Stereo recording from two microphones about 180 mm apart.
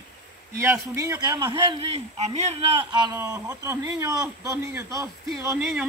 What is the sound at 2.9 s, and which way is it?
Speech, 20° right (ahead or behind).